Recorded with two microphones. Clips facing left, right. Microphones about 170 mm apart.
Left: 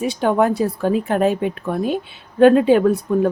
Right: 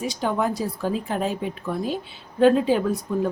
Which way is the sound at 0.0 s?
60° left (ahead or behind).